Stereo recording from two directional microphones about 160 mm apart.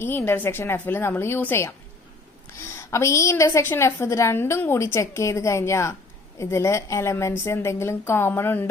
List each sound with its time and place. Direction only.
0.0 s a woman's voice: 15° left (ahead or behind)
2.7 s a woman's voice: 20° left (ahead or behind)